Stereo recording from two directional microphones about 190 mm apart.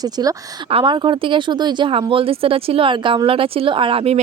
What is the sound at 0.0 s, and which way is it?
Speech, 20° right (ahead or behind).